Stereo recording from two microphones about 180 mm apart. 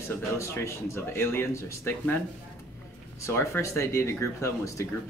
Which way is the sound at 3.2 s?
15° left (ahead or behind).